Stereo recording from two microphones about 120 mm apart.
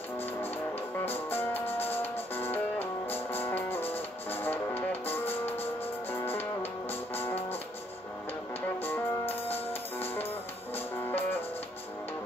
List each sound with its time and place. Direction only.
1.0 s music: 20° left (ahead or behind)
8.8 s music: 15° left (ahead or behind)